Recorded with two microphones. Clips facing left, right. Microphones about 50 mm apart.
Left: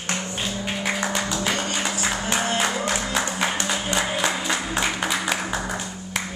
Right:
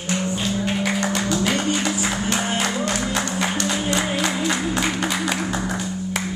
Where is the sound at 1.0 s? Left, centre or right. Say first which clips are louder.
Right 3 dB; centre.